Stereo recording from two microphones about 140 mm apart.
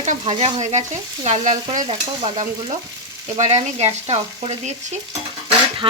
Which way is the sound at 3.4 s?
50° right (ahead or behind).